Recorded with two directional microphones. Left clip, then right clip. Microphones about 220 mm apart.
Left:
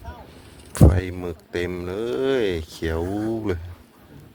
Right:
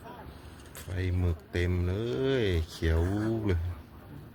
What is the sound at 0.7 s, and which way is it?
Speech, 30° left (ahead or behind).